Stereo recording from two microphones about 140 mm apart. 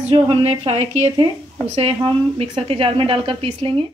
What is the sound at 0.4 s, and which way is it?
A woman's voice, 45° right (ahead or behind).